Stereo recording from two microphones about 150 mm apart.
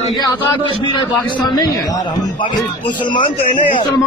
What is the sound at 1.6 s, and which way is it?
A man's voice, 30° left (ahead or behind).